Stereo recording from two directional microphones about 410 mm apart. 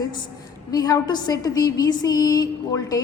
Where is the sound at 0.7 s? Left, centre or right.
Centre.